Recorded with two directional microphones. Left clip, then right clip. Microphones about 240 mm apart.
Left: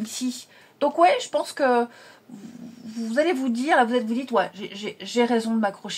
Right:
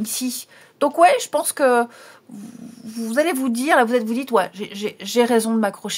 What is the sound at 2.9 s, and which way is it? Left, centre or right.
Speech, right.